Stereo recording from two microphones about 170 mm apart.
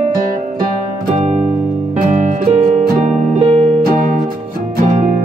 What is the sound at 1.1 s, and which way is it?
Music, 40° right (ahead or behind).